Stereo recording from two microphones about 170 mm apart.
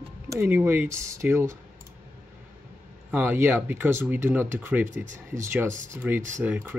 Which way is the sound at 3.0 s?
10° right (ahead or behind).